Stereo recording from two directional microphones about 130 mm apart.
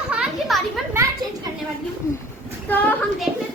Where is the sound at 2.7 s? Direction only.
15° left (ahead or behind).